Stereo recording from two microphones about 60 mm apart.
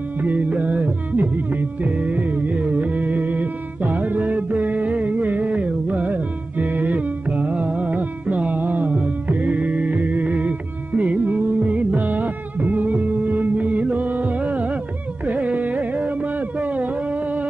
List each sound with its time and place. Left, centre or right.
0.2 s music: right
15.2 s carnatic music: right